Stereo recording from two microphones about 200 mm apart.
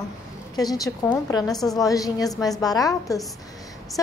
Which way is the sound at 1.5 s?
Centre (ahead or behind).